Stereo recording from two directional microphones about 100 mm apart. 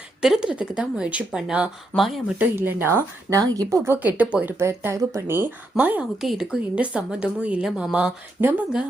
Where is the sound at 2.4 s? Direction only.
20° right (ahead or behind).